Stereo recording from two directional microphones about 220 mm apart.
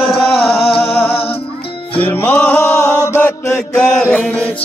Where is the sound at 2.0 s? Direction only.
5° left (ahead or behind).